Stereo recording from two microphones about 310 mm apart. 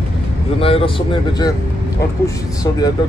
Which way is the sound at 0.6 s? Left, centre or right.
Centre.